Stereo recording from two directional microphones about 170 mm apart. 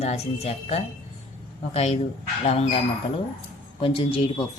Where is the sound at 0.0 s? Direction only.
35° left (ahead or behind).